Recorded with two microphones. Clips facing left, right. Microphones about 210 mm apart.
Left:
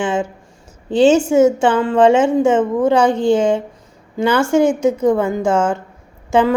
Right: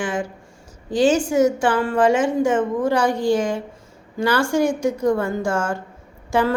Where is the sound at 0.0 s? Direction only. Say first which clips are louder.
Left 5 dB; 25° left (ahead or behind).